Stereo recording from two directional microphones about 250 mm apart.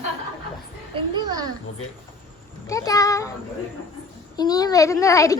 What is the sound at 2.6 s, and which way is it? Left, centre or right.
Speech, centre.